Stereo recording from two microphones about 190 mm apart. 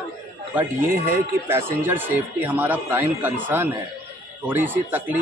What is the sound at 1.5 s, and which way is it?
Speech, 10° right (ahead or behind).